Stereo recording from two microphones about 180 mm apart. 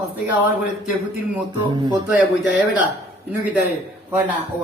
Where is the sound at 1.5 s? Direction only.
20° right (ahead or behind).